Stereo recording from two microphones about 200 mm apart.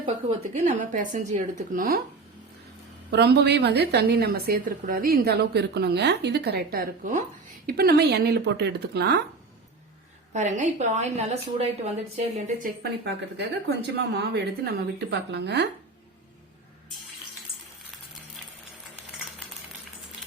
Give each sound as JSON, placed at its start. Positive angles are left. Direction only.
{"t": 0.6, "sound": "a woman's voice", "side_deg": -40}
{"t": 3.1, "sound": "a woman's voice", "side_deg": -55}
{"t": 7.7, "sound": "speech", "side_deg": -50}
{"t": 10.3, "sound": "a woman's voice", "side_deg": -35}
{"t": 12.5, "sound": "a woman's voice", "side_deg": -40}
{"t": 13.3, "sound": "speech", "side_deg": -60}